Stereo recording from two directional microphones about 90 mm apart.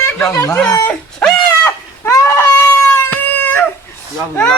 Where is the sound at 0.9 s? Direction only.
15° left (ahead or behind).